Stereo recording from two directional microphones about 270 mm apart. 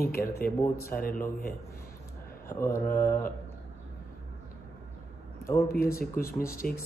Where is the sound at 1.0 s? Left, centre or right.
Left.